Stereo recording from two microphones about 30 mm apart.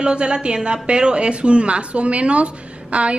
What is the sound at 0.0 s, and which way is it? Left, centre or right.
A woman's voice, right.